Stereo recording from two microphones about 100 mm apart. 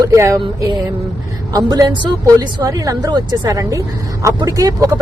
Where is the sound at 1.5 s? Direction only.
40° right (ahead or behind).